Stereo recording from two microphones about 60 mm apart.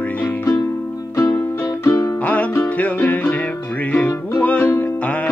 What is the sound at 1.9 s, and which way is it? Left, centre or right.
Music, left.